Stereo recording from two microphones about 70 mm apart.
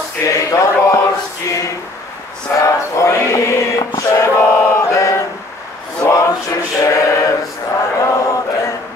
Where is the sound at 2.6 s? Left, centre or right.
Left.